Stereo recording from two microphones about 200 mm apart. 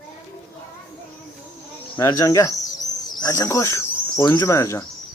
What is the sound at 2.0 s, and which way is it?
Cricket, 15° left (ahead or behind).